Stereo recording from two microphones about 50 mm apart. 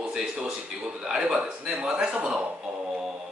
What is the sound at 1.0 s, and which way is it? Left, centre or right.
A man's voice, centre.